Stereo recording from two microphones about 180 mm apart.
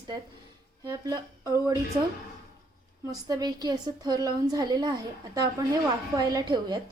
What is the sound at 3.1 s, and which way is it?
A woman's voice, 20° right (ahead or behind).